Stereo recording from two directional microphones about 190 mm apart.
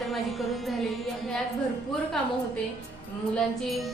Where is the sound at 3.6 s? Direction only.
Centre (ahead or behind).